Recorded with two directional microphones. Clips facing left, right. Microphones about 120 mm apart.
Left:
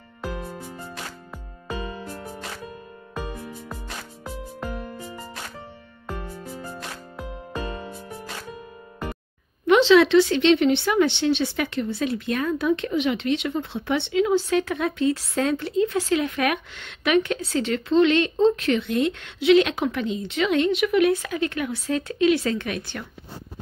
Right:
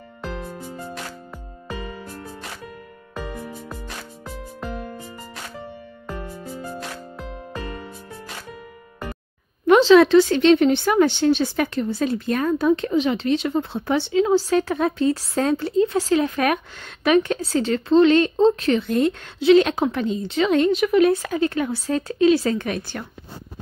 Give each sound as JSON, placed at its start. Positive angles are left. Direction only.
{"t": 9.7, "sound": "speech", "side_deg": -40}